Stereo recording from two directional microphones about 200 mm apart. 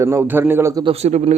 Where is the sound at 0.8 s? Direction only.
30° right (ahead or behind).